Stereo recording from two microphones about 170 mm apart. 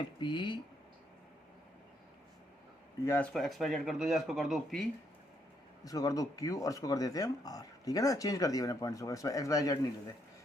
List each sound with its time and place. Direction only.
0.2 s speech: 25° left (ahead or behind)
3.0 s speech: 15° left (ahead or behind)
3.3 s speech: centre (ahead or behind)
5.8 s speech: 20° left (ahead or behind)